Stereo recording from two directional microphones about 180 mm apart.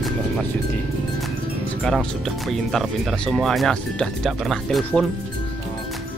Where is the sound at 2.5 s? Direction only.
Centre (ahead or behind).